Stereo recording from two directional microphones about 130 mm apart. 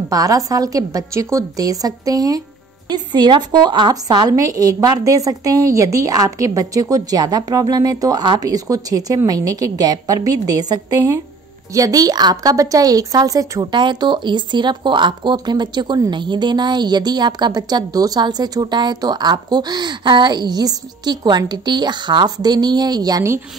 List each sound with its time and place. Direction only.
0.1 s a woman's voice: 25° right (ahead or behind)